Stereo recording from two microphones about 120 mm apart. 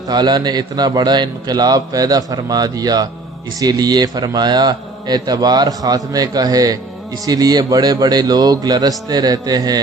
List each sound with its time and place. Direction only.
0.1 s a man's voice: 35° right (ahead or behind)